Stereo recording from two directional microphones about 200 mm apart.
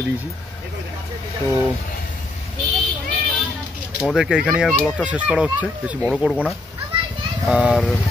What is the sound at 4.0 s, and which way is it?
A child's voice, 5° right (ahead or behind).